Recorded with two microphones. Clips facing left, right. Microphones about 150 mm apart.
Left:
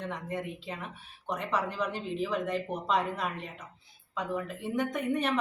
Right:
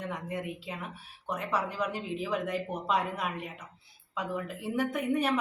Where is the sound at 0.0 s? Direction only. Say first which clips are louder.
Even; 10° right (ahead or behind).